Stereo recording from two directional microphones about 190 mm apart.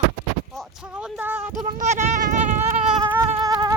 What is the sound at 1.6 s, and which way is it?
Goat, 40° right (ahead or behind).